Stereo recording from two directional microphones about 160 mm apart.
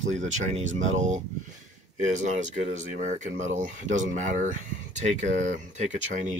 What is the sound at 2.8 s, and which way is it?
Speech, 50° right (ahead or behind).